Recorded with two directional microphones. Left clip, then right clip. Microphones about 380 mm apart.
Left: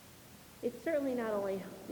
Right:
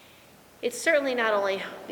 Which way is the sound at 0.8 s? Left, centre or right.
Centre.